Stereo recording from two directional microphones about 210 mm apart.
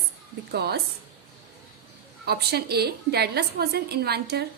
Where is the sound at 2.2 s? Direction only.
50° right (ahead or behind).